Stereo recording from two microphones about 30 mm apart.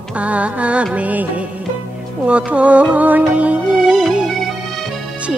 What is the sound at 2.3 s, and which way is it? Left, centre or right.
Music, right.